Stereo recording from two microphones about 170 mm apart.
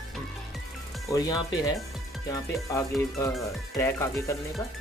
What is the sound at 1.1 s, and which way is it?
Music, 20° left (ahead or behind).